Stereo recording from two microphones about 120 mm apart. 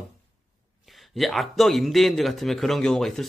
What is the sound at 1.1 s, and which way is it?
Speech, centre (ahead or behind).